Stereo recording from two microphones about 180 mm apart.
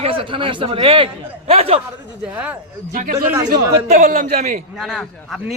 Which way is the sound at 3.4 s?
50° right (ahead or behind).